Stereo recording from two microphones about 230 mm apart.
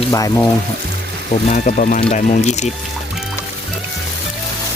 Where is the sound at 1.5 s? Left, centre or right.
Left.